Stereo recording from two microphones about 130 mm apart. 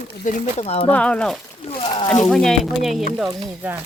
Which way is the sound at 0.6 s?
50° left (ahead or behind).